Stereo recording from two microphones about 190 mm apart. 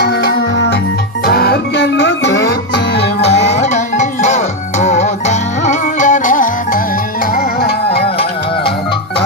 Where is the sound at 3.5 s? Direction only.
40° left (ahead or behind); by 8.1 s 55° left (ahead or behind).